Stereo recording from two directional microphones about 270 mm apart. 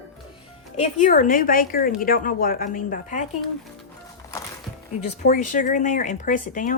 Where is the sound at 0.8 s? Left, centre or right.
Left.